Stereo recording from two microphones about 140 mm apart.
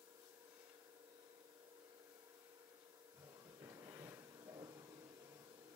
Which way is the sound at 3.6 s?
20° right (ahead or behind).